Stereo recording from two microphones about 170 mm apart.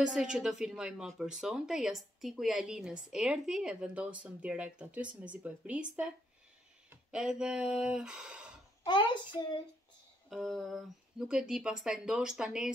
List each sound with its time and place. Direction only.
0.0 s speech: 5° right (ahead or behind)
8.8 s a child's voice: 25° left (ahead or behind)
10.3 s speech: centre (ahead or behind)